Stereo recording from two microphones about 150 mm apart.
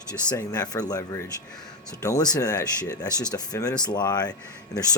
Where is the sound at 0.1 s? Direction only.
25° left (ahead or behind).